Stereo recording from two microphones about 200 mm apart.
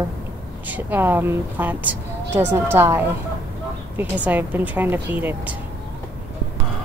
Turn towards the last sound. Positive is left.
turn(degrees=-10)  # may be behind; listen again after turning